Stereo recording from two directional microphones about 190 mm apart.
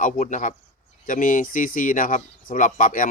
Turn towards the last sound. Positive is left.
turn(degrees=45)  # may be behind; listen again after turning